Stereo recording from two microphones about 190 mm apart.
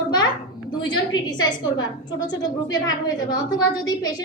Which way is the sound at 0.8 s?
20° left (ahead or behind).